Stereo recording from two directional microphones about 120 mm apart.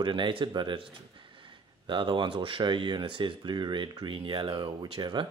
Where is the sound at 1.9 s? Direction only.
40° right (ahead or behind).